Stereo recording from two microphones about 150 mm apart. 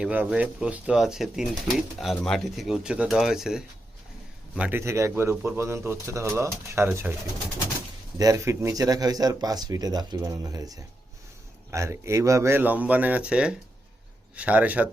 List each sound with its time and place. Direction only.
0.0 s speech: 10° right (ahead or behind)
8.2 s speech: 20° right (ahead or behind)